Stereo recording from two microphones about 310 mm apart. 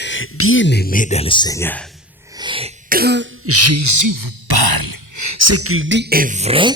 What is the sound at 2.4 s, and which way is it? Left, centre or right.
Throat clearing, centre.